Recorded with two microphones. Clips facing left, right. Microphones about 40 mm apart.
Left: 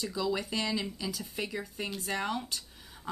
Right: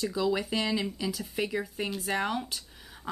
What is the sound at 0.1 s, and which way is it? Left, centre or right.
Speech, centre.